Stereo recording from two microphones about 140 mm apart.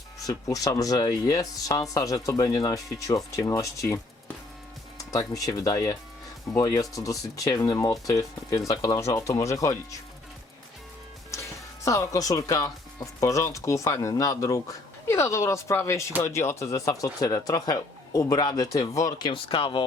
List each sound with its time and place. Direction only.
0.2 s speech: 25° left (ahead or behind)
11.9 s speech: 25° left (ahead or behind)
19.3 s speech: 40° left (ahead or behind)